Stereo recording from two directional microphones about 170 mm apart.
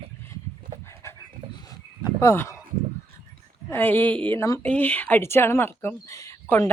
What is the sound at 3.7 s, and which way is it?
Speech, 10° left (ahead or behind).